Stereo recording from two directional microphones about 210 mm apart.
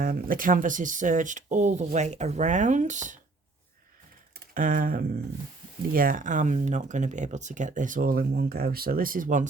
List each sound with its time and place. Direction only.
0.0 s speech: 40° right (ahead or behind)
4.4 s a sound: 40° right (ahead or behind)
5.9 s speech: 40° right (ahead or behind)